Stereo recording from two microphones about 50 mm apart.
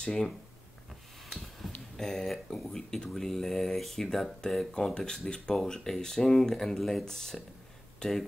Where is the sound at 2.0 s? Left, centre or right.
Centre.